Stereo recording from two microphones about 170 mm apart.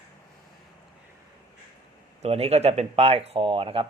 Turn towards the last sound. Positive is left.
turn(degrees=-30)  # may be behind; listen again after turning